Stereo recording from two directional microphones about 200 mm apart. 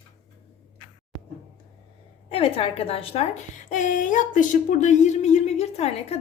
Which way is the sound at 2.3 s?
30° left (ahead or behind).